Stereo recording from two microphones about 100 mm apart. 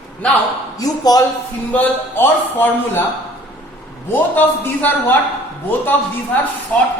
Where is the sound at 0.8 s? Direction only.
40° left (ahead or behind).